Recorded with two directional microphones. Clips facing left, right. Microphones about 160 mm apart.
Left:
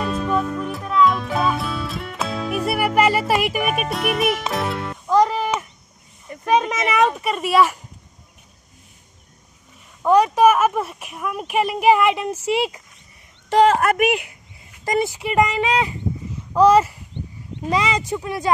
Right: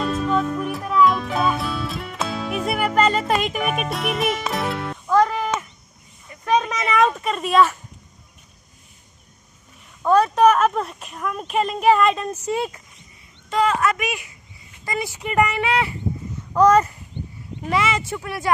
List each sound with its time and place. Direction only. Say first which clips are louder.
0.0 s music: right 1 dB; centre (ahead or behind)
5.0 s music: left 1 dB; 15° left (ahead or behind)
6.4 s speech: left 2 dB; 15° left (ahead or behind)
10.0 s speech: left 1 dB; 15° left (ahead or behind)
13.5 s speech: left 5 dB; 55° left (ahead or behind)
15.0 s speech: left 1 dB; 15° left (ahead or behind)